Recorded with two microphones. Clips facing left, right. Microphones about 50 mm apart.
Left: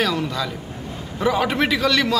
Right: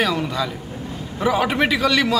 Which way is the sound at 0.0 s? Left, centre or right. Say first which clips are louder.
Right 1 dB; centre.